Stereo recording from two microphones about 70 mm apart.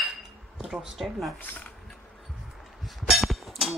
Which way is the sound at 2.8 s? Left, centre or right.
Centre.